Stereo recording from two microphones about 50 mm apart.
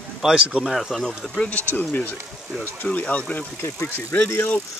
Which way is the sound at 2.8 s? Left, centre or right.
Left.